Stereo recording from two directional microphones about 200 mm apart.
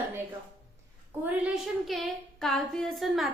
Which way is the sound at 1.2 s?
Centre (ahead or behind).